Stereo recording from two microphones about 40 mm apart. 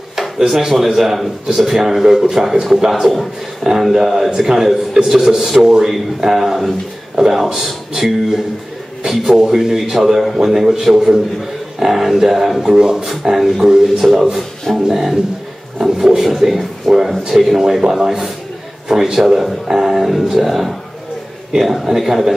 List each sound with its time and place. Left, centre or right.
0.4 s speech: centre
2.9 s speech: centre
12.7 s speech: centre
13.2 s speech: centre
14.1 s speech: centre